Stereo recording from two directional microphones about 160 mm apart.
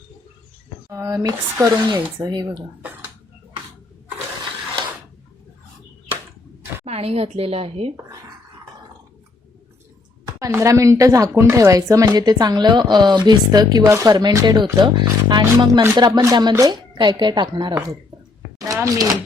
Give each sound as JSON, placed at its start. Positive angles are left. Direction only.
{"t": 0.9, "sound": "a woman's voice", "side_deg": -20}
{"t": 6.8, "sound": "a woman's voice", "side_deg": -40}
{"t": 10.4, "sound": "a woman's voice", "side_deg": -20}
{"t": 18.6, "sound": "a sound", "side_deg": -20}